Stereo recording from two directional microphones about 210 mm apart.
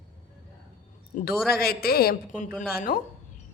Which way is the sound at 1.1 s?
45° left (ahead or behind).